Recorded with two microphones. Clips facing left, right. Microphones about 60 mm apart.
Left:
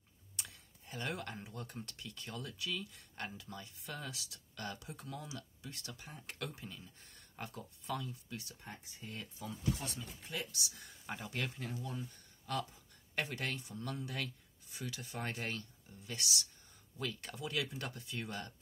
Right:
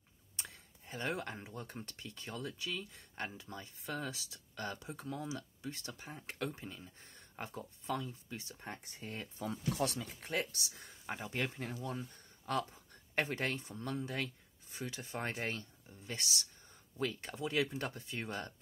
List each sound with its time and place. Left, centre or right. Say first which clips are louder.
0.4 s speech: right 1 dB; right
8.6 s speech: right 4 dB; right
9.1 s speech: right 4 dB; right
9.8 s speech: right 9 dB; right
10.3 s speech: right 6 dB; right
10.7 s speech: right 2 dB; right
11.8 s speech: right 4 dB; right
12.5 s speech: right 3 dB; right